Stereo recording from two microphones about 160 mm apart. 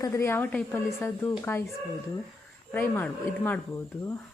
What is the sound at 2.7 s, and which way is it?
Speech, 10° left (ahead or behind).